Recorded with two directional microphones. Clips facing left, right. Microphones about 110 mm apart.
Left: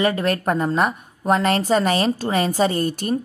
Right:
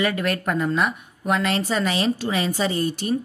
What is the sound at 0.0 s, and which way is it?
A woman's voice, 30° left (ahead or behind).